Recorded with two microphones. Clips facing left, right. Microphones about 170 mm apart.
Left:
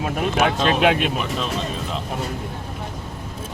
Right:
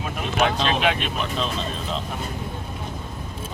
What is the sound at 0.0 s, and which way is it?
Vehicle, 45° left (ahead or behind).